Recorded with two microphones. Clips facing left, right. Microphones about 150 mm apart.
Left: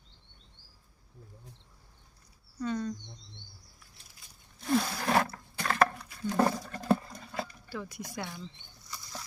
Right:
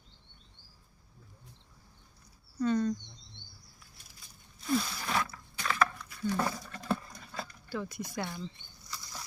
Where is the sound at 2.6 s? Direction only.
5° left (ahead or behind).